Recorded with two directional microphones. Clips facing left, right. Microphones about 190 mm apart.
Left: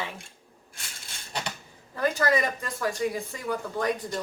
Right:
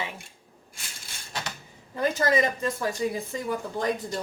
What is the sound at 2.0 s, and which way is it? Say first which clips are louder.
A woman's voice: right 1 dB; 20° right (ahead or behind).